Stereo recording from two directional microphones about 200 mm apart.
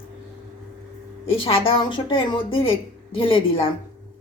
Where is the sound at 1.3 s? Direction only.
25° left (ahead or behind).